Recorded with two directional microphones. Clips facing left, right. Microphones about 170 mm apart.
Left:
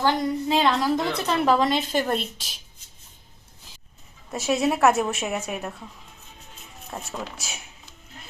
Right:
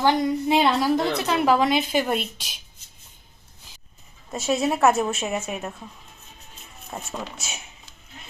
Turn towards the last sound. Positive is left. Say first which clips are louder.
# right 1 dB
turn(degrees=0)  # may be behind; listen again after turning